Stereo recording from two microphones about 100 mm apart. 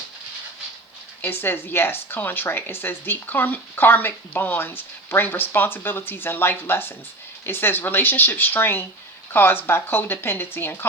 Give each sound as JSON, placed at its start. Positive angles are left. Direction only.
{"t": 1.2, "sound": "a woman's voice", "side_deg": 20}